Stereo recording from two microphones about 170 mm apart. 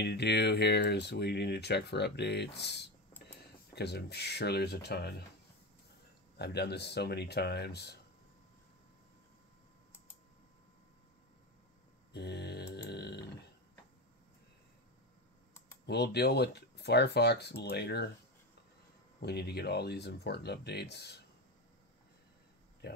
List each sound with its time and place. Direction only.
0.0 s speech: 75° left (ahead or behind)
6.3 s speech: 75° left (ahead or behind)
12.1 s grunt: 75° left (ahead or behind)
15.9 s speech: 75° left (ahead or behind)
19.1 s speech: 70° left (ahead or behind)